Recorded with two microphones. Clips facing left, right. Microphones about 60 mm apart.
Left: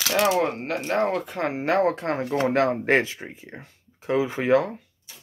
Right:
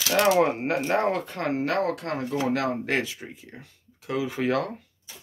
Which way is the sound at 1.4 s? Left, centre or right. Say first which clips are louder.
Left 3 dB; centre.